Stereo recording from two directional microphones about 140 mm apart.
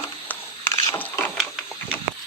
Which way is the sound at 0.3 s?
15° left (ahead or behind).